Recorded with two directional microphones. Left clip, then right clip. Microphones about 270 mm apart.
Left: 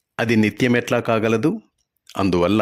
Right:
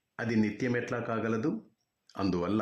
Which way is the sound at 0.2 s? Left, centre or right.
Left.